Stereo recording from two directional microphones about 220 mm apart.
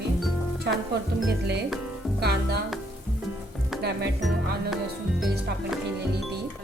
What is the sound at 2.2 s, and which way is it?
Speech, 45° right (ahead or behind).